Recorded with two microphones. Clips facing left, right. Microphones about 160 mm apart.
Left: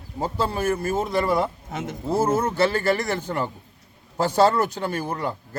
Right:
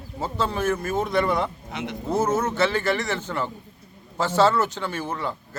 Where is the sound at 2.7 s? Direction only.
40° left (ahead or behind).